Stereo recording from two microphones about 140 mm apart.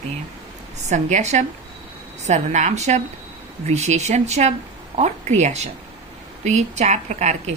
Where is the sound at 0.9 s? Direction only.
55° right (ahead or behind).